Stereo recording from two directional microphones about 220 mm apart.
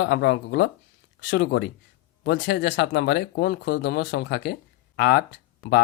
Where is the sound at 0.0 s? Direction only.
50° left (ahead or behind).